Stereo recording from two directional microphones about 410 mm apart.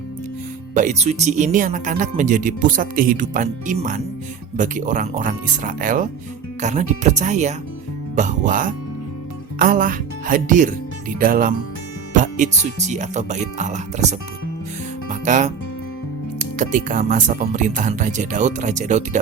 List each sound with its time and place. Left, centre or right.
0.7 s speech: centre
16.6 s speech: centre